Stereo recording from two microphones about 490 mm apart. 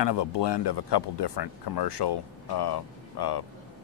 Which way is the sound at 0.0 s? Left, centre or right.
Left.